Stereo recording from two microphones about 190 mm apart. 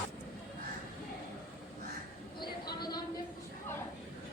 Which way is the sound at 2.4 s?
20° left (ahead or behind).